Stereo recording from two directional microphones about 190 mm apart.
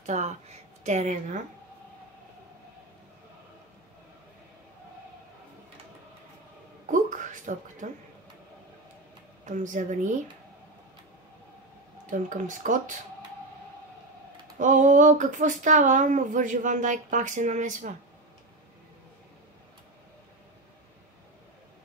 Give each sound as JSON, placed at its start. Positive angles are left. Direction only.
{"t": 0.0, "sound": "a woman's voice", "side_deg": -40}
{"t": 6.9, "sound": "a sound", "side_deg": -40}
{"t": 9.5, "sound": "speech", "side_deg": -40}
{"t": 12.1, "sound": "speech", "side_deg": -40}
{"t": 14.6, "sound": "speech", "side_deg": -40}